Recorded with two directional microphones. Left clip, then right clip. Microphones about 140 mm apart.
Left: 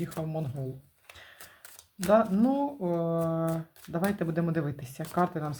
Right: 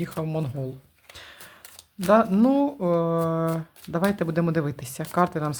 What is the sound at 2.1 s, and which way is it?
Speech, 30° right (ahead or behind).